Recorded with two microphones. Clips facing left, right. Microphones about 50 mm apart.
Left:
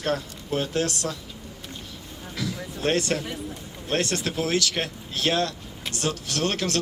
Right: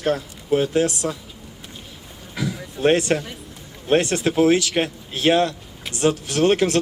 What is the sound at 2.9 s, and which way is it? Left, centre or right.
Speech, right.